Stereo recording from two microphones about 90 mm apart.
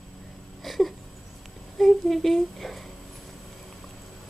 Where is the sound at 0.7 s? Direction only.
Centre (ahead or behind).